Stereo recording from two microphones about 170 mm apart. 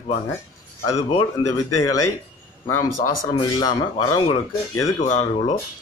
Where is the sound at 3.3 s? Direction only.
25° left (ahead or behind).